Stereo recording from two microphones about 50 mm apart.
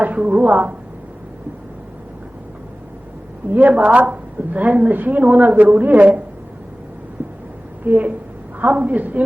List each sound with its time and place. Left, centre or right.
0.0 s speech: right
3.5 s a woman's voice: right
7.9 s a woman's voice: right